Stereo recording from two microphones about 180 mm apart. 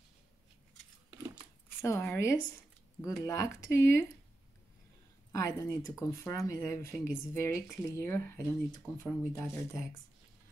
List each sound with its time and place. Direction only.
1.8 s speech: 15° left (ahead or behind)
5.3 s speech: 20° left (ahead or behind)